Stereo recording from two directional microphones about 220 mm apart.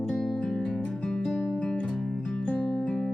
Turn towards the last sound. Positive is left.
turn(degrees=5)  # may be behind; listen again after turning